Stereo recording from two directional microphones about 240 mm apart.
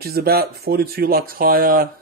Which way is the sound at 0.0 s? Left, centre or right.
Right.